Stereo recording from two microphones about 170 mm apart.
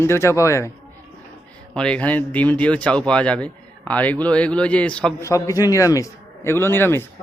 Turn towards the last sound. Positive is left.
turn(degrees=15)  # may be behind; listen again after turning